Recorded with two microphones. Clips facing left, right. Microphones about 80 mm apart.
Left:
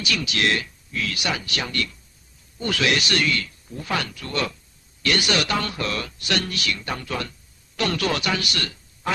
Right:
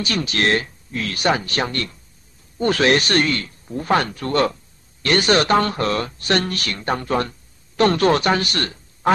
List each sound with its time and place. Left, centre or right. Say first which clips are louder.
0.0 s speech: right 3 dB; right